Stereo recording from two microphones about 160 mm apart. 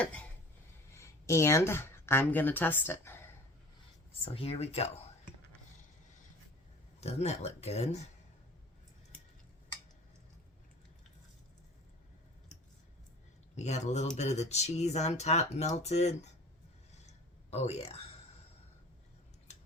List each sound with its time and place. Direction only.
0.0 s a sound: 10° left (ahead or behind)
0.9 s speech: 15° left (ahead or behind)
4.3 s speech: 35° left (ahead or behind)
7.0 s speech: 40° left (ahead or behind)
13.6 s speech: 45° left (ahead or behind)
17.1 s a sound: 40° left (ahead or behind)